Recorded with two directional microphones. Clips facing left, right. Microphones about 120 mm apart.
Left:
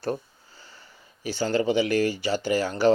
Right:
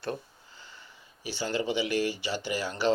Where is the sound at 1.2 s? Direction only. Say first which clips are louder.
Left 6 dB; 45° left (ahead or behind).